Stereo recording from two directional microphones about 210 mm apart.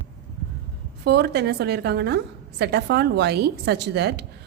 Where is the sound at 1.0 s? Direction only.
50° right (ahead or behind).